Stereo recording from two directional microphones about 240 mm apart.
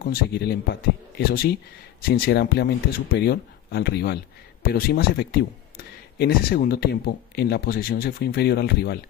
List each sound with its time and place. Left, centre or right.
0.0 s speech: left